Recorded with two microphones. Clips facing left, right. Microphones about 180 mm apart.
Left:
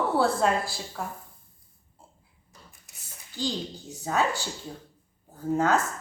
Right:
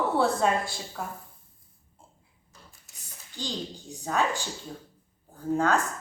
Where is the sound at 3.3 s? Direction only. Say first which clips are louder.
Left 4 dB; 15° right (ahead or behind).